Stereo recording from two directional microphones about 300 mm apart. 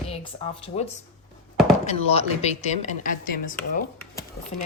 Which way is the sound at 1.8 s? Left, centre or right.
Left.